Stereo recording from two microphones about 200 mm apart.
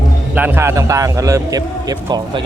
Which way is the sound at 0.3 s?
10° right (ahead or behind).